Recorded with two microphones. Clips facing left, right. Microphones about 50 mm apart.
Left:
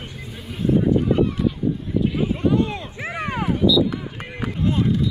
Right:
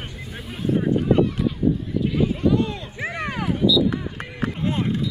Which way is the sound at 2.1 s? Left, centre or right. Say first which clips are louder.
Right 3 dB; centre.